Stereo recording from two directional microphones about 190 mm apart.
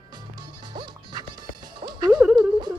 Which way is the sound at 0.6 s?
25° right (ahead or behind).